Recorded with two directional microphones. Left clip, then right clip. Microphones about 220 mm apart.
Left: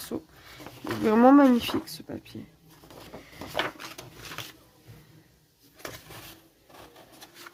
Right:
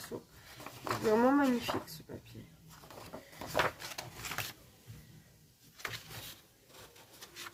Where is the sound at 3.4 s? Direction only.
Centre (ahead or behind).